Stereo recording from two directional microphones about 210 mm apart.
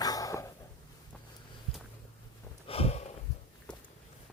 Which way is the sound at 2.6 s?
30° left (ahead or behind).